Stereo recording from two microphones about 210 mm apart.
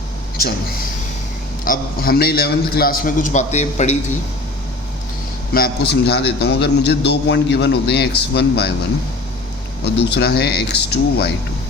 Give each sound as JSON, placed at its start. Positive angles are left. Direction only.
{"t": 0.3, "sound": "a man's voice", "side_deg": 45}
{"t": 5.5, "sound": "a man's voice", "side_deg": 50}
{"t": 9.8, "sound": "a man's voice", "side_deg": 50}